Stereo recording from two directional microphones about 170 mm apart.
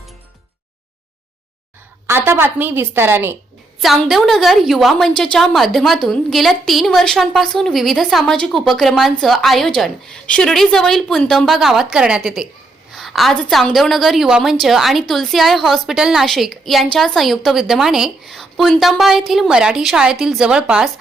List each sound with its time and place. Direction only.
2.0 s a woman's voice: 15° right (ahead or behind)
3.8 s a woman's voice: centre (ahead or behind)